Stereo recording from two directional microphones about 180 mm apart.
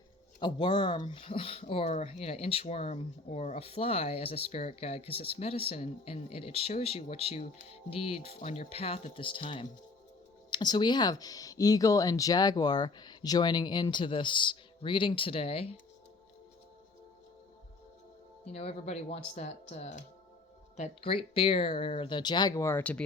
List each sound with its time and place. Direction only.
0.3 s speech: 25° left (ahead or behind)
18.4 s speech: 35° left (ahead or behind); by 23.0 s 10° left (ahead or behind)